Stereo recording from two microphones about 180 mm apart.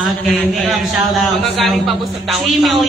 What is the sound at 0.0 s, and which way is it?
A man's voice, centre (ahead or behind).